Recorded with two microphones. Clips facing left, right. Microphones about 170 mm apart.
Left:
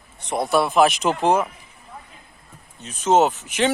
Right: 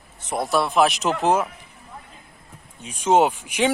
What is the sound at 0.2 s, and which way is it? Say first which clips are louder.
Speech: left 2 dB; centre (ahead or behind).